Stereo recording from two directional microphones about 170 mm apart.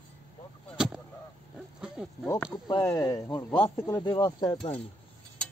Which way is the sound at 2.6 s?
20° left (ahead or behind).